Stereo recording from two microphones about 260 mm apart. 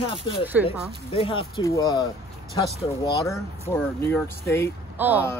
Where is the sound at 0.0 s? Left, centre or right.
Left.